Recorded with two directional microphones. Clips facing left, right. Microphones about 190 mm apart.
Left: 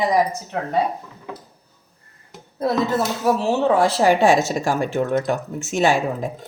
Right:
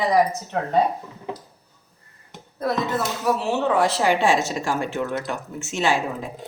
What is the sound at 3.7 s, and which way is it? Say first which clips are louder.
A woman's voice: left 3 dB; 35° left (ahead or behind).